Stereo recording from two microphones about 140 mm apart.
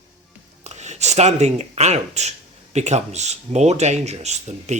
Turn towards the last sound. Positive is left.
turn(degrees=-55)  # may be behind; listen again after turning